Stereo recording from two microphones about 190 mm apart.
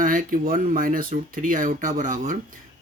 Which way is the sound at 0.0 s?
45° right (ahead or behind).